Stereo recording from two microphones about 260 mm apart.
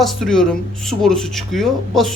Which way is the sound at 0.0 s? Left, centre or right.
Centre.